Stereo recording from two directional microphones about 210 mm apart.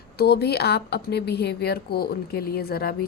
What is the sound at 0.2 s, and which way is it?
A woman's voice, 50° left (ahead or behind).